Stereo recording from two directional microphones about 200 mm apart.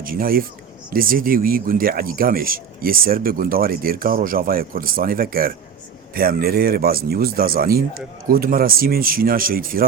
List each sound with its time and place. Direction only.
0.0 s a man's voice: 45° right (ahead or behind)